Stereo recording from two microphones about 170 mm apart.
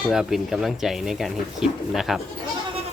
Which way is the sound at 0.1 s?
5° right (ahead or behind).